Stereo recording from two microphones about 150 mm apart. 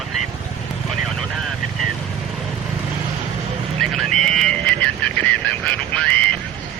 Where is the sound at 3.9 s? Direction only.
5° left (ahead or behind).